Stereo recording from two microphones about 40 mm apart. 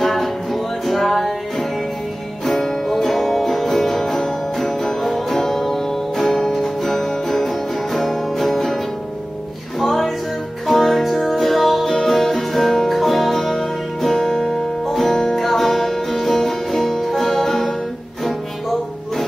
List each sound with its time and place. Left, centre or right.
0.0 s music: centre
9.8 s music: centre